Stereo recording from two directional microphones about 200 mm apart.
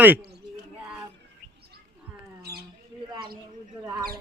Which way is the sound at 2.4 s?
50° right (ahead or behind).